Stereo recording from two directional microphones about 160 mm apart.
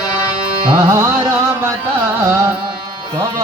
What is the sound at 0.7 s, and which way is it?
Music, 20° right (ahead or behind).